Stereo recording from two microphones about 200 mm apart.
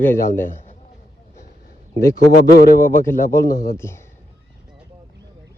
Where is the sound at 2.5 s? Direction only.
50° left (ahead or behind).